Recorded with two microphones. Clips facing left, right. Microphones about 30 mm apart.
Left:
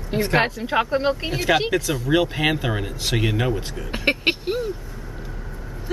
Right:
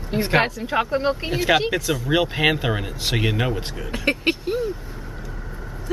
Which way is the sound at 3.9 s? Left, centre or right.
Left.